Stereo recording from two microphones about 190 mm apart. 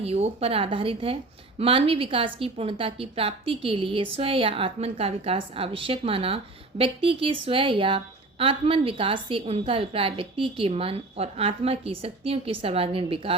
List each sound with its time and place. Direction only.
0.0 s a woman's voice: 35° right (ahead or behind)